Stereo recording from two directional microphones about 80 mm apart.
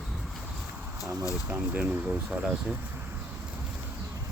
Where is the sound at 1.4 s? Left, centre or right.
Right.